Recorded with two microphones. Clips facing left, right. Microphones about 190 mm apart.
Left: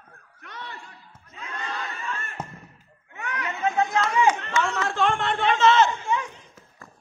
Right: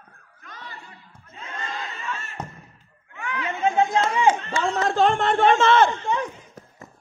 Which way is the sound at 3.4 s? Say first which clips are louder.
Right 3 dB; 25° right (ahead or behind).